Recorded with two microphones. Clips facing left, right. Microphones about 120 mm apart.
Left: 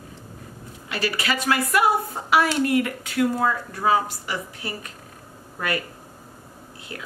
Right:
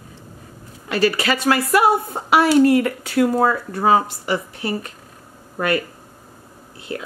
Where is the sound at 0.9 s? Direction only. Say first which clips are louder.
Right 8 dB; 45° right (ahead or behind).